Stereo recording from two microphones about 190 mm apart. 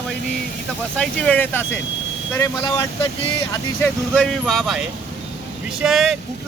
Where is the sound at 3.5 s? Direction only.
10° left (ahead or behind).